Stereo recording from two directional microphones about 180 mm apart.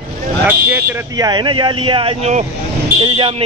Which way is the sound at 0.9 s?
20° right (ahead or behind).